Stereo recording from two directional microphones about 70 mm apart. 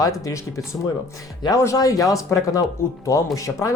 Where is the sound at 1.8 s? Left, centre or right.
Left.